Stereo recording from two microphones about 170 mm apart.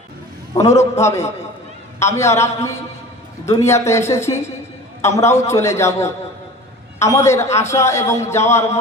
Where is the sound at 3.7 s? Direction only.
15° left (ahead or behind).